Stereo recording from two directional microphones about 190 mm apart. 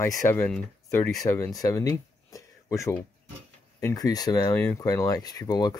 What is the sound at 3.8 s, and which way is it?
Speech, 20° left (ahead or behind).